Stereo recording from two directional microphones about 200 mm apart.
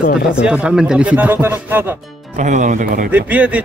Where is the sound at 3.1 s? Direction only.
5° right (ahead or behind).